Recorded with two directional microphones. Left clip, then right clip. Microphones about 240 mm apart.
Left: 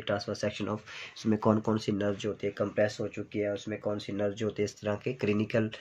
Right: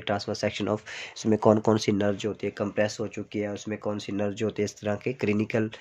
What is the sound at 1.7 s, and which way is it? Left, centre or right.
Speech, right.